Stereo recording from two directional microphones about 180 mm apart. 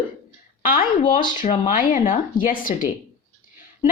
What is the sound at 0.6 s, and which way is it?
A woman's voice, 50° left (ahead or behind).